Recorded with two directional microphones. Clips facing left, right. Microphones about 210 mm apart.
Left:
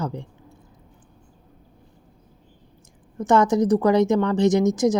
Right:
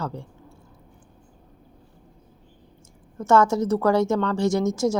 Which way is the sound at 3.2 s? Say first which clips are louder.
Left 1 dB; 15° left (ahead or behind).